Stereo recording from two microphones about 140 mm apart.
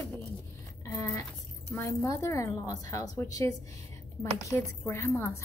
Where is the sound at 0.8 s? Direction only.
20° left (ahead or behind).